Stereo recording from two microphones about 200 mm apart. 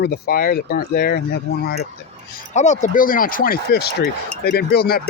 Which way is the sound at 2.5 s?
35° left (ahead or behind).